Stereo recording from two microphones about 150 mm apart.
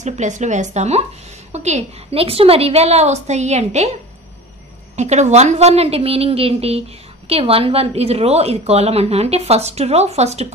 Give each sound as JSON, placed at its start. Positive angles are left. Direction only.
{"t": 0.0, "sound": "speech", "side_deg": -55}
{"t": 4.9, "sound": "speech", "side_deg": -50}